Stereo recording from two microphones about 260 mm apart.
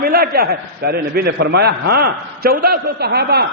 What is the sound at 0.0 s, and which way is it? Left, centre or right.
A man's voice, right.